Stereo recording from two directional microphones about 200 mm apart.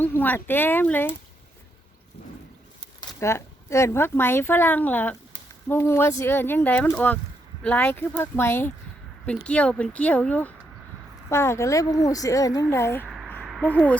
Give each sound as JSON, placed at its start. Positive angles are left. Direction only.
{"t": 0.0, "sound": "speech", "side_deg": 10}
{"t": 3.1, "sound": "speech", "side_deg": 15}
{"t": 13.1, "sound": "a sound", "side_deg": 0}
{"t": 13.7, "sound": "speech", "side_deg": 5}